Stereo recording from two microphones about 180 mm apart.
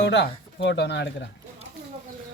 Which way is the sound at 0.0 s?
85° left.